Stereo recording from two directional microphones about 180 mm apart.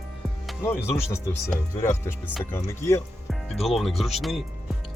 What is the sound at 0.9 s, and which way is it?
Speech, 15° left (ahead or behind).